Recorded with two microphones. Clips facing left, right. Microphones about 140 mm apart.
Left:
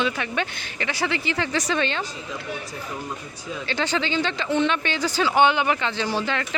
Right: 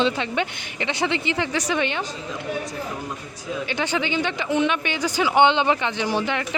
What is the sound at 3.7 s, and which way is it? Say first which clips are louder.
A woman's voice: left 1 dB; 15° right (ahead or behind).